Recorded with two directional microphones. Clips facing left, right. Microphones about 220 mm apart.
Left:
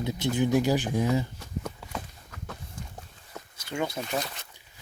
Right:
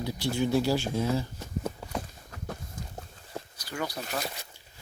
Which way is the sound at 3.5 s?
25° left (ahead or behind).